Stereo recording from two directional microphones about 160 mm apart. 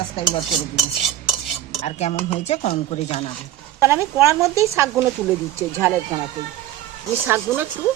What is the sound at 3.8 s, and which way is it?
Speech, 20° right (ahead or behind).